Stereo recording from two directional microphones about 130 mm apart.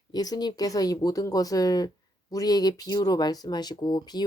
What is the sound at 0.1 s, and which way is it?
Speech, 30° left (ahead or behind).